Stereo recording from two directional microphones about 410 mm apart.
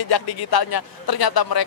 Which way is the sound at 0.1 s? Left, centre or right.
Left.